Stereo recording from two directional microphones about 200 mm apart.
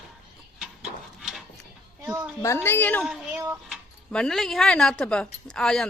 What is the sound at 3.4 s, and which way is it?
Dog, 10° right (ahead or behind).